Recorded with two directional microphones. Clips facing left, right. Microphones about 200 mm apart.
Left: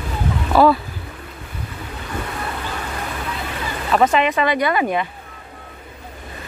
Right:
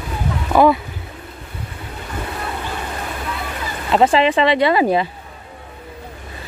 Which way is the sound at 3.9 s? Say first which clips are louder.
Right 2 dB; 25° right (ahead or behind).